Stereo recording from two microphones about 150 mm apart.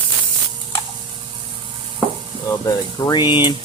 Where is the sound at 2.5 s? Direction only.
25° left (ahead or behind).